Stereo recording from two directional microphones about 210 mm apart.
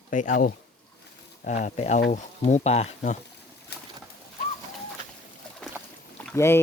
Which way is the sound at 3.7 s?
50° left (ahead or behind).